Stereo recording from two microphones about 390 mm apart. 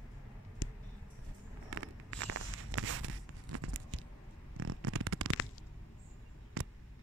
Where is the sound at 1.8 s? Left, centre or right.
Right.